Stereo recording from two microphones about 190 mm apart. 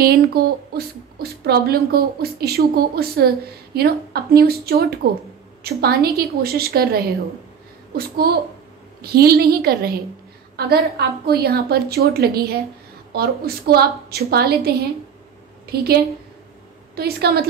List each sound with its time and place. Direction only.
0.0 s a woman's voice: 55° right (ahead or behind)